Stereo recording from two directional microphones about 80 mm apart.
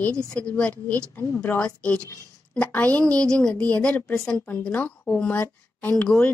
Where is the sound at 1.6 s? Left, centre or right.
Centre.